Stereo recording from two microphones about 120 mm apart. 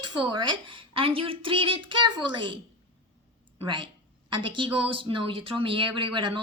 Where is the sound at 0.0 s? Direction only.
40° right (ahead or behind).